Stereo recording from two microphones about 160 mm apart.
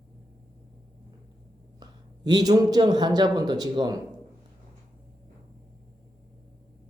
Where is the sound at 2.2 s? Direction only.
25° right (ahead or behind).